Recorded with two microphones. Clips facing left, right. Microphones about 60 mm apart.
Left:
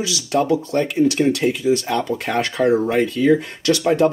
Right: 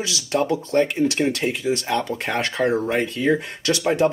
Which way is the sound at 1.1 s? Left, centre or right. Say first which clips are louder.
Left 4 dB; centre.